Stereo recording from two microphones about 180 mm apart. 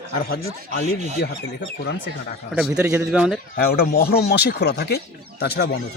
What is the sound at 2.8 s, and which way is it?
Speech, 15° right (ahead or behind).